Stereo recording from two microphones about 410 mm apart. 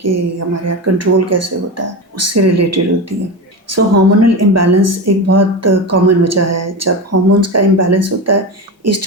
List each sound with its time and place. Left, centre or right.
0.0 s speech: right